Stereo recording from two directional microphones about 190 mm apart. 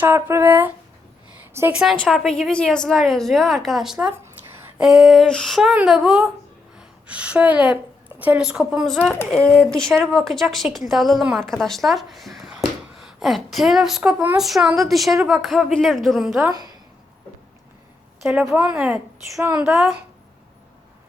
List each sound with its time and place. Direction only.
0.0 s a woman's voice: 15° right (ahead or behind)
16.5 s a woman's voice: 20° right (ahead or behind)
18.2 s a woman's voice: 5° right (ahead or behind)